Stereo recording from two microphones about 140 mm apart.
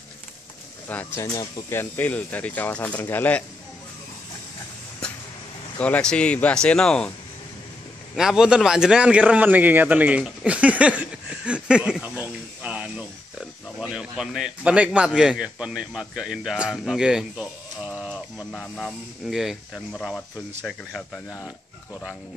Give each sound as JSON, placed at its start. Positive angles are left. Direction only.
{"t": 0.8, "sound": "speech", "side_deg": 10}
{"t": 5.0, "sound": "vehicle", "side_deg": 5}
{"t": 5.8, "sound": "speech", "side_deg": 10}
{"t": 8.2, "sound": "a man's voice", "side_deg": -5}
{"t": 18.5, "sound": "speech", "side_deg": 5}